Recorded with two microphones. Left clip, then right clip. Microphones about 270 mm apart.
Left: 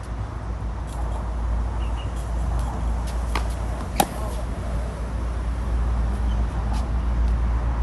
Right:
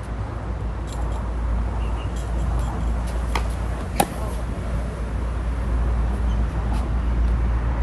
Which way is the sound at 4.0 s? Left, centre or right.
Centre.